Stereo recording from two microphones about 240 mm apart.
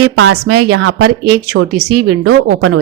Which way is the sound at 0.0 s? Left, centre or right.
Right.